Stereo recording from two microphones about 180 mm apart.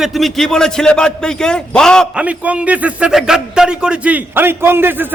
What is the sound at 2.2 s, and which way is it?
A man's voice, 5° right (ahead or behind).